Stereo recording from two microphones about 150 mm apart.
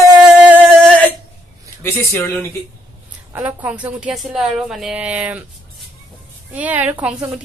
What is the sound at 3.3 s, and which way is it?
A woman's voice, 10° right (ahead or behind).